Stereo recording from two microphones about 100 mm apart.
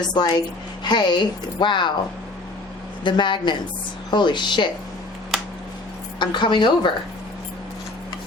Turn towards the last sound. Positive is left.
turn(degrees=50)  # may be behind; listen again after turning